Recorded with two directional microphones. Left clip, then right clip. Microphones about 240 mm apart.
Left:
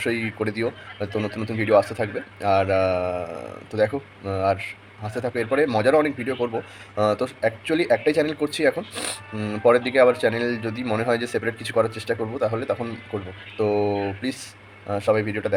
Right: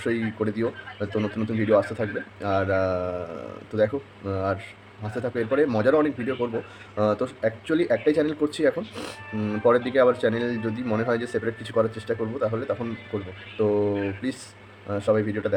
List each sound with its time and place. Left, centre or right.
0.0 s speech: centre